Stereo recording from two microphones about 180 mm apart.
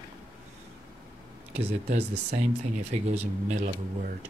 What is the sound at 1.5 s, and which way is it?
Speech, 35° right (ahead or behind).